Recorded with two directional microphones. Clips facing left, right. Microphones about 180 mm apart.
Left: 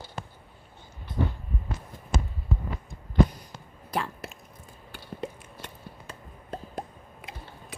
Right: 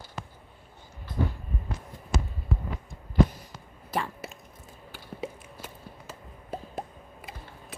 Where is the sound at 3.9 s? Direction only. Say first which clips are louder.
Even; centre (ahead or behind).